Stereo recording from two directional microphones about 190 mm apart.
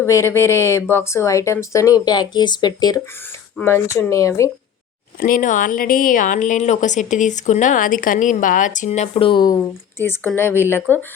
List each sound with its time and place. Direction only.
0.0 s speech: 15° left (ahead or behind)
5.2 s a woman's voice: 45° left (ahead or behind); by 9.6 s 25° left (ahead or behind)
10.0 s speech: 10° left (ahead or behind)